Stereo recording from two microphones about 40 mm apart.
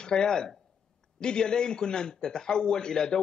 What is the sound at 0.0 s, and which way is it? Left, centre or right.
A man's voice, centre.